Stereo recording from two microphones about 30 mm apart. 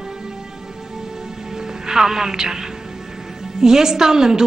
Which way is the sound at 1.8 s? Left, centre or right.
Centre.